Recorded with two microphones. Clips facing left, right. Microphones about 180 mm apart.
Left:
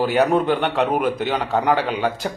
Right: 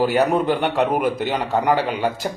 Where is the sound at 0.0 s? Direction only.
10° right (ahead or behind).